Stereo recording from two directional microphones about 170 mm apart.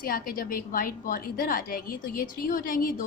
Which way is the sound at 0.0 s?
60° left (ahead or behind).